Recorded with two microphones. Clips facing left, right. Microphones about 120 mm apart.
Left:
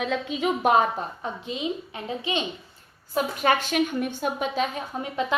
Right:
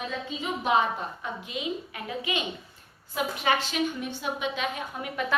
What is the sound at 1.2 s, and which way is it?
A woman's voice, 30° left (ahead or behind).